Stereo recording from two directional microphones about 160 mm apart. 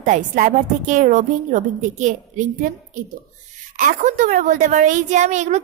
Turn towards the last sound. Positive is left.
turn(degrees=-45)  # may be behind; listen again after turning